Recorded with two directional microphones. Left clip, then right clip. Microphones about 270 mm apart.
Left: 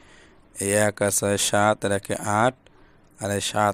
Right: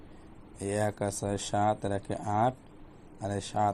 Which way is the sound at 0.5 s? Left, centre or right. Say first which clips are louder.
Left 9 dB; left.